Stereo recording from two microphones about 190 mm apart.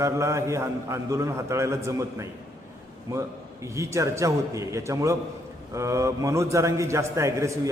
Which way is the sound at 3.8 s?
15° right (ahead or behind).